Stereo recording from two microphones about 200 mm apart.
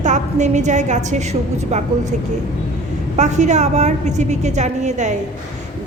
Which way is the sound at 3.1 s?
35° right (ahead or behind).